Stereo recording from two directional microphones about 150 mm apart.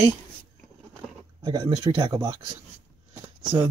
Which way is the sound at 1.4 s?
30° right (ahead or behind).